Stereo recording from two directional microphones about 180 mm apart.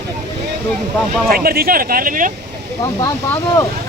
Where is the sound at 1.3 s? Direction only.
60° right (ahead or behind).